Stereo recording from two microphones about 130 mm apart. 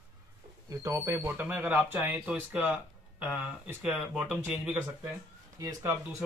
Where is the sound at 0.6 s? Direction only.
25° right (ahead or behind).